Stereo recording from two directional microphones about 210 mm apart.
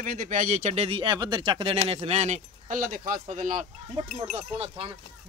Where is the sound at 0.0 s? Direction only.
40° right (ahead or behind).